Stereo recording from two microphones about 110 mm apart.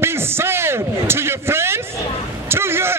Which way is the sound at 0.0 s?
20° right (ahead or behind).